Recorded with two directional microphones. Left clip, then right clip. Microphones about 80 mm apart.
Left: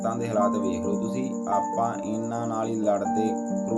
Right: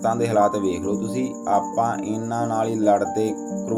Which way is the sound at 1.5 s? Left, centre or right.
Right.